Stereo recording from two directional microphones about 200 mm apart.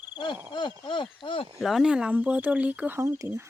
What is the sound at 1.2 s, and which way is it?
Speech, 25° left (ahead or behind).